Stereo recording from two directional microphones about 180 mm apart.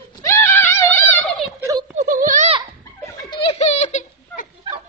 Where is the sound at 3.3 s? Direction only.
30° left (ahead or behind).